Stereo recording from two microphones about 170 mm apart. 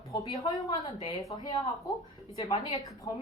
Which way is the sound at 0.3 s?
20° left (ahead or behind).